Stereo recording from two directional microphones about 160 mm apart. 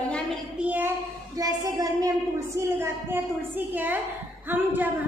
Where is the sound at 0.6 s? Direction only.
10° right (ahead or behind).